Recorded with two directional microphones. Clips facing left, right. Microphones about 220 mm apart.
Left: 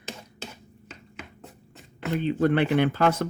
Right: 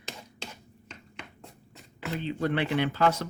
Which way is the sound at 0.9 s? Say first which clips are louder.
Left 2 dB; 5° left (ahead or behind).